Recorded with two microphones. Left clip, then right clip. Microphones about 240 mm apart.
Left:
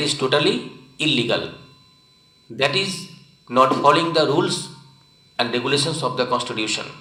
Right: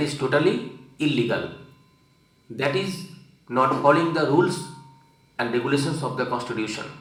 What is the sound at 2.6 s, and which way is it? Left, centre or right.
A man's voice, left.